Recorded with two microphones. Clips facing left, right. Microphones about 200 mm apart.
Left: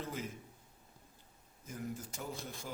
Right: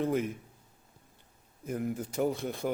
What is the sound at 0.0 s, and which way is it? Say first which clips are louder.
Speech: right 13 dB; 60° right (ahead or behind).